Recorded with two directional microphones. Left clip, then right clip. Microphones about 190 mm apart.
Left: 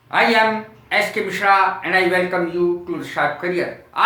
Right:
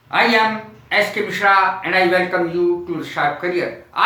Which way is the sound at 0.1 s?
15° left (ahead or behind).